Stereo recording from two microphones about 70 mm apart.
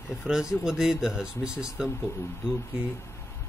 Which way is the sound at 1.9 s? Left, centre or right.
Left.